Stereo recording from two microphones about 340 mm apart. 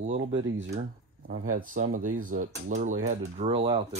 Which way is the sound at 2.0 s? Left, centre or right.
Right.